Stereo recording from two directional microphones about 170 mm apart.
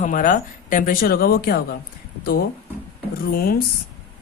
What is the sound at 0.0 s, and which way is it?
Speech, 50° left (ahead or behind).